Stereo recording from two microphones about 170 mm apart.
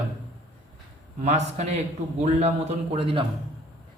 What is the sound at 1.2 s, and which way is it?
A man's voice, 40° right (ahead or behind).